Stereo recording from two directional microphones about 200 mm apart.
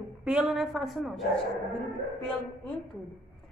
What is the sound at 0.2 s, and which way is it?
A woman's voice, 5° right (ahead or behind).